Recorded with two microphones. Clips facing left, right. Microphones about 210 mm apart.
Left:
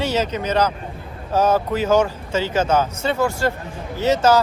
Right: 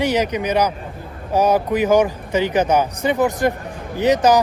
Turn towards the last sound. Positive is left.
turn(degrees=-15)  # may be behind; listen again after turning